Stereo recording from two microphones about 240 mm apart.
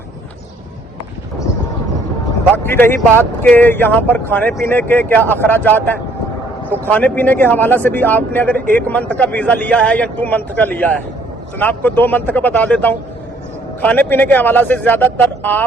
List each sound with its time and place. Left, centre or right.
2.6 s speech: centre